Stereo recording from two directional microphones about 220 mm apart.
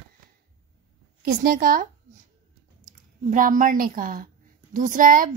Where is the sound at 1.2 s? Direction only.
40° right (ahead or behind).